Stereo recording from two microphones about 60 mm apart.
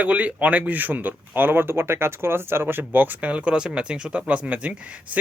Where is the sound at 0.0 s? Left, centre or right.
Right.